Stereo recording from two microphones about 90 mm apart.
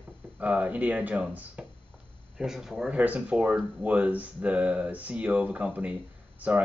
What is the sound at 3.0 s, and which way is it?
Speech, 15° right (ahead or behind).